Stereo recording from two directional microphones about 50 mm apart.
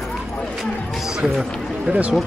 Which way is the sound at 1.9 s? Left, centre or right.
Right.